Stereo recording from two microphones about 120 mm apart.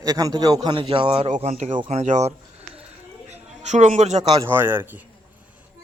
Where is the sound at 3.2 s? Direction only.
65° right (ahead or behind).